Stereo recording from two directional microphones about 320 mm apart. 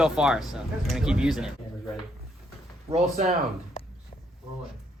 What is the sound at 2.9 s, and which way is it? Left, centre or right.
Speech, right.